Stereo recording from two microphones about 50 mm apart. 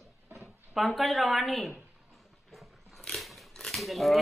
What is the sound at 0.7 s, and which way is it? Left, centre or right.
Speech, centre.